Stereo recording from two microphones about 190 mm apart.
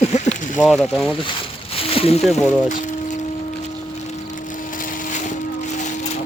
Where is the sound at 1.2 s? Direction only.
25° left (ahead or behind).